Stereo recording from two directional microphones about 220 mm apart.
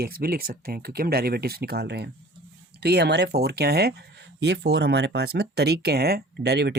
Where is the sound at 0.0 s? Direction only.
45° right (ahead or behind).